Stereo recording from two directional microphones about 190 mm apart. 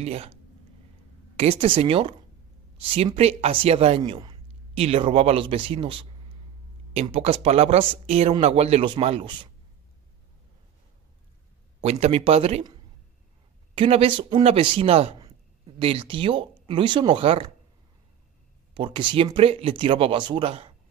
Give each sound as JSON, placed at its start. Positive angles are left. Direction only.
{"t": 0.0, "sound": "a man's voice", "side_deg": -30}
{"t": 11.8, "sound": "speech", "side_deg": -30}
{"t": 13.7, "sound": "speech", "side_deg": -30}
{"t": 18.8, "sound": "a man's voice", "side_deg": -25}